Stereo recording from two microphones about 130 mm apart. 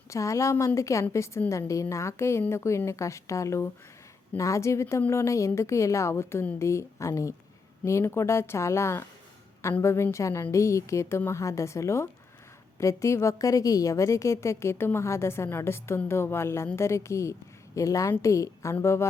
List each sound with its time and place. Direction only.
0.1 s a woman's voice: 25° left (ahead or behind)